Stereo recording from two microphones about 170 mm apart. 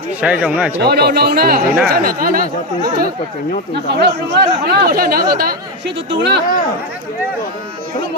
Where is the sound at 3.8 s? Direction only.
80° right.